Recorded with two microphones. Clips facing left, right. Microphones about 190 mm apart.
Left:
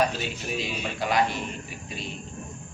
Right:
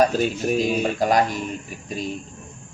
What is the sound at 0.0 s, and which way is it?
Speech, 45° right (ahead or behind).